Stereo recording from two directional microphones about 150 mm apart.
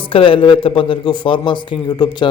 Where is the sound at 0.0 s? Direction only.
35° left (ahead or behind).